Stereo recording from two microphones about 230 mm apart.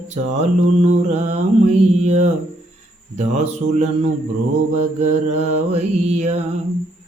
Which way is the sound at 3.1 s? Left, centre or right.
Right.